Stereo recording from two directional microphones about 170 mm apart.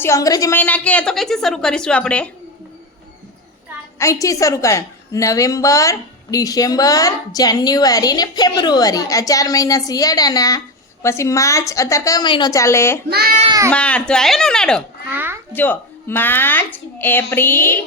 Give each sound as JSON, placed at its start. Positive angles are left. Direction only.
{"t": 0.0, "sound": "a woman's voice", "side_deg": 20}
{"t": 0.6, "sound": "a woman's voice", "side_deg": 10}
{"t": 3.9, "sound": "a woman's voice", "side_deg": 20}
{"t": 13.1, "sound": "a child's voice", "side_deg": -65}
{"t": 13.7, "sound": "a woman's voice", "side_deg": 5}
{"t": 15.1, "sound": "a sound", "side_deg": -10}
{"t": 15.5, "sound": "a woman's voice", "side_deg": 10}